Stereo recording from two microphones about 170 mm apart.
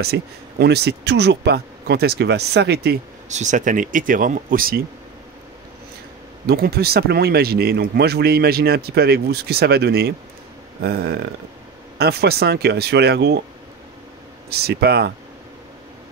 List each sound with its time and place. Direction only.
0.0 s speech: 75° right (ahead or behind)
3.3 s speech: 45° right (ahead or behind)
6.4 s speech: 65° right (ahead or behind)
14.5 s speech: 70° right (ahead or behind)